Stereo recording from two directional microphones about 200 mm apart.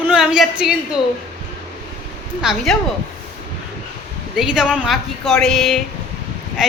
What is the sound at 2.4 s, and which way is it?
Speech, centre (ahead or behind).